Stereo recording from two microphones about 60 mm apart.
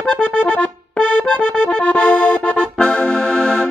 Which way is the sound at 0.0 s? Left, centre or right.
Left.